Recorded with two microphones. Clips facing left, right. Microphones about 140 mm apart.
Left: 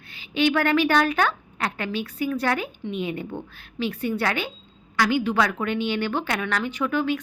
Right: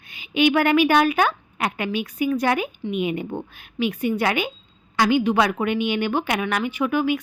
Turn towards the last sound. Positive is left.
turn(degrees=-10)  # may be behind; listen again after turning